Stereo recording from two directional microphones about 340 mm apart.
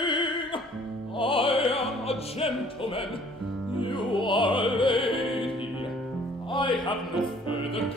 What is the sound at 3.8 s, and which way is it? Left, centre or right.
Music, centre.